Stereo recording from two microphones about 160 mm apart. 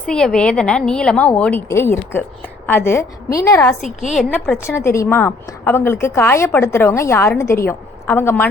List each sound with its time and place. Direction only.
0.0 s a woman's voice: 5° left (ahead or behind); by 3.6 s 20° left (ahead or behind)
3.8 s a woman's voice: 50° left (ahead or behind)
4.2 s a woman's voice: 5° right (ahead or behind)
4.5 s a woman's voice: 15° left (ahead or behind)